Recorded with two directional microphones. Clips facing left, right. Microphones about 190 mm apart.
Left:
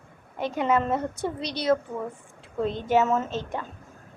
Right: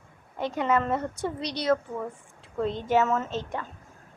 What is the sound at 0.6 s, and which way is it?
Speech, 20° left (ahead or behind).